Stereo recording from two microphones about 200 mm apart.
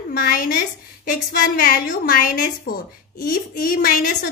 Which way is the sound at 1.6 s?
45° left (ahead or behind).